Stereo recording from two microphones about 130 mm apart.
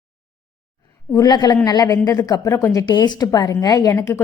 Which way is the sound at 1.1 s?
30° left (ahead or behind).